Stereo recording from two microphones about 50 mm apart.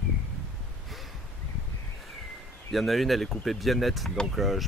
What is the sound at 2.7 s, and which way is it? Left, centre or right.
Speech, centre.